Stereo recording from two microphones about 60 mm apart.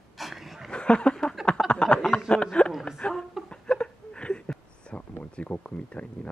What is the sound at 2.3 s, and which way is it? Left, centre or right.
Speech, centre.